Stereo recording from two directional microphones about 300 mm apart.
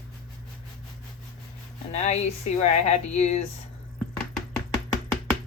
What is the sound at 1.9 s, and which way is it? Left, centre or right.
Speech, left.